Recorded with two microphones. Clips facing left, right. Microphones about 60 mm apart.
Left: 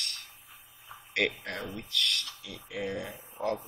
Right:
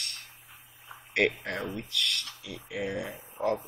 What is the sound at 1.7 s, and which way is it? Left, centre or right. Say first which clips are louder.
Speech: even; centre.